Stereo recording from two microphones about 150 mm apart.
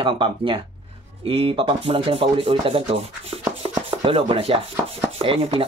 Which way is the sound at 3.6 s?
40° right (ahead or behind).